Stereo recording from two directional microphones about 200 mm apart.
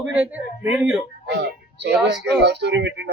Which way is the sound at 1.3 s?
60° right (ahead or behind).